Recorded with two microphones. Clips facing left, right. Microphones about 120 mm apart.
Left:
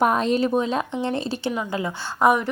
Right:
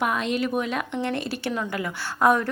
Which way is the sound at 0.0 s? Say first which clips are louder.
Left 5 dB; 40° left (ahead or behind).